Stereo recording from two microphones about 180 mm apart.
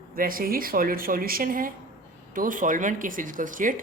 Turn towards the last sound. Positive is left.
turn(degrees=-45)  # may be behind; listen again after turning